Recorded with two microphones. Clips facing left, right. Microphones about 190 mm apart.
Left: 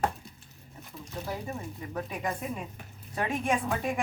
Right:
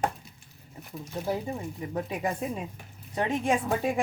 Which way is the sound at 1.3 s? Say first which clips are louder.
Right 6 dB; 25° right (ahead or behind).